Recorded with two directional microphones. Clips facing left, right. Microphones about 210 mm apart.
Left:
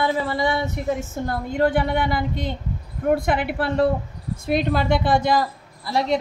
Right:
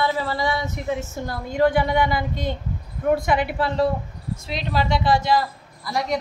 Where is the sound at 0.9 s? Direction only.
55° left (ahead or behind).